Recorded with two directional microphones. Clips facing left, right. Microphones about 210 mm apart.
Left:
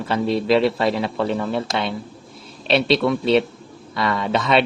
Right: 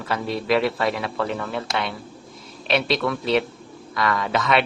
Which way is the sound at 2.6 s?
30° left (ahead or behind).